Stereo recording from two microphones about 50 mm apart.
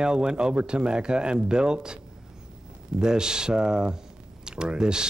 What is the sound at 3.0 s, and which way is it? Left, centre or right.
Speech, centre.